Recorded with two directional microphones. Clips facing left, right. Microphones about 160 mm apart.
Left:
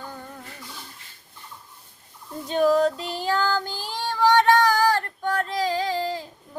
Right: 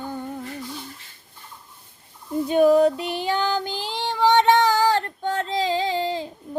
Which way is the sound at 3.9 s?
20° right (ahead or behind).